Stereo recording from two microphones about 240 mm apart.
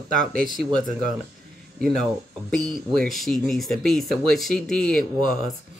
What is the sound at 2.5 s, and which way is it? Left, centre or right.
Speech, centre.